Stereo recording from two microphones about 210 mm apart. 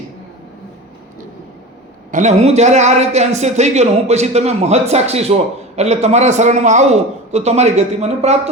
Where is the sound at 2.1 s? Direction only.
30° right (ahead or behind).